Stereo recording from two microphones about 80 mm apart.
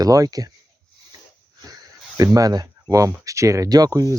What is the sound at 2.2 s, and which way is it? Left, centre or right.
Speech, right.